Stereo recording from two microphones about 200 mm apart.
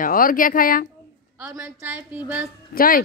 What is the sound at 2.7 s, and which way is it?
Speech, 45° left (ahead or behind).